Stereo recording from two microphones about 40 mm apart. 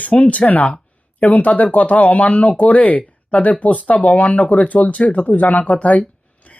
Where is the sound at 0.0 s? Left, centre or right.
Left.